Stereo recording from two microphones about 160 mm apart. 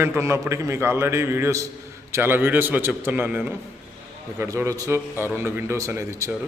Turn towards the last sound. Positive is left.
turn(degrees=-15)  # may be behind; listen again after turning